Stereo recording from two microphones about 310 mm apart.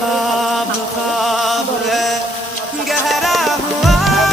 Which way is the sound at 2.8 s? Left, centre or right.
Centre.